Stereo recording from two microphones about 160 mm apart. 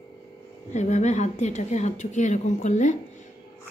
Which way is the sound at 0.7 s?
50° left (ahead or behind).